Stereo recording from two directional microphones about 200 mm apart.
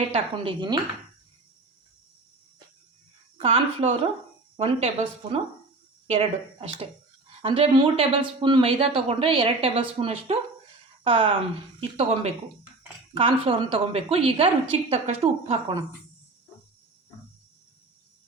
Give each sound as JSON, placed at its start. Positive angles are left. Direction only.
{"t": 0.1, "sound": "speech", "side_deg": -25}
{"t": 3.3, "sound": "speech", "side_deg": -30}